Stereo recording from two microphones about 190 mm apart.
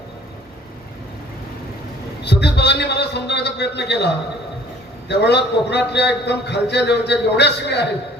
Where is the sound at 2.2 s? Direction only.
65° left (ahead or behind).